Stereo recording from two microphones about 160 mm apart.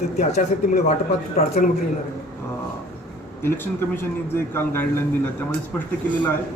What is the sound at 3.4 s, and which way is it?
A man's voice, 15° left (ahead or behind).